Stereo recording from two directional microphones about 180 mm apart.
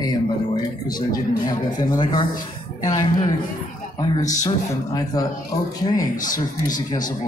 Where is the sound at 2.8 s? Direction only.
20° left (ahead or behind).